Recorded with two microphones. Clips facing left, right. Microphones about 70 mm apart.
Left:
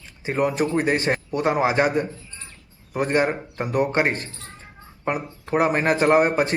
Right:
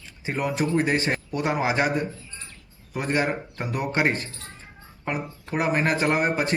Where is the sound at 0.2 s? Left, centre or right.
Left.